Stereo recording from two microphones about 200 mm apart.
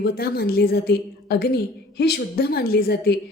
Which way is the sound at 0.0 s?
50° left (ahead or behind).